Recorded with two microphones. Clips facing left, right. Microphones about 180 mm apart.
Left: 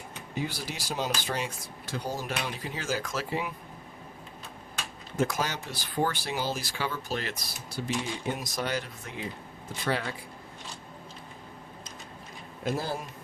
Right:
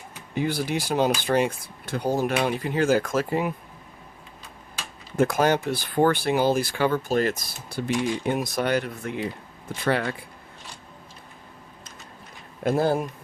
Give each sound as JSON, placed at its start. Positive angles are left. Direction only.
{"t": 0.3, "sound": "speech", "side_deg": -60}
{"t": 5.1, "sound": "speech", "side_deg": -55}
{"t": 12.6, "sound": "speech", "side_deg": -55}